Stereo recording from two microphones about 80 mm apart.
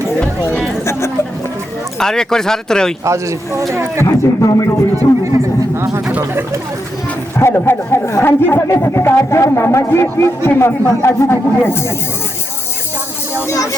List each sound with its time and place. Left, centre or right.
0.9 s a sound: left
2.0 s speech: centre
3.0 s speech: right
3.9 s speech: left
4.9 s speech: right
6.1 s speech: right
7.3 s a man's voice: left